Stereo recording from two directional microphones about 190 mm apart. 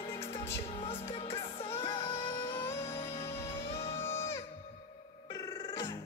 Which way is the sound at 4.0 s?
15° left (ahead or behind).